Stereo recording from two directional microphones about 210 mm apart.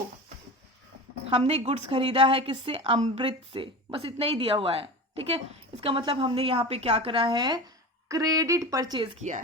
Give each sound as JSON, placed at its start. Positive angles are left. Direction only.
{"t": 1.3, "sound": "a woman's voice", "side_deg": -30}